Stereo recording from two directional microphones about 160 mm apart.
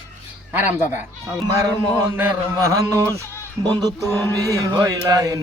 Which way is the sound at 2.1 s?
15° right (ahead or behind).